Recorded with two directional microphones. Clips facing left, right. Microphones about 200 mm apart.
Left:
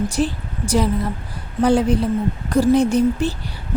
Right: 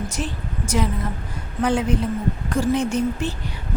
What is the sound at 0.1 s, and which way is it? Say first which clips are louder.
A woman's voice: left 7 dB; 35° left (ahead or behind).